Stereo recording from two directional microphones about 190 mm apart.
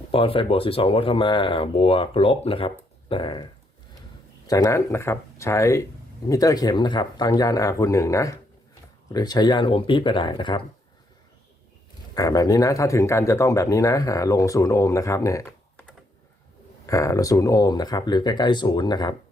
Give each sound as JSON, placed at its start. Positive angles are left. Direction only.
{"t": 0.1, "sound": "speech", "side_deg": 30}
{"t": 4.4, "sound": "speech", "side_deg": 20}
{"t": 12.1, "sound": "speech", "side_deg": 20}
{"t": 16.8, "sound": "speech", "side_deg": 15}